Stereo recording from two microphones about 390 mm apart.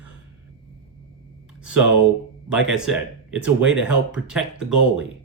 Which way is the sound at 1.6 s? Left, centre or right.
Centre.